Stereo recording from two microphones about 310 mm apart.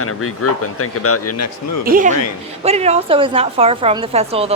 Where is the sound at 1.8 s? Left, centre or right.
Right.